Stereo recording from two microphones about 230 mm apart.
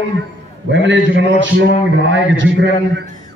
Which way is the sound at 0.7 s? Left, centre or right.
Right.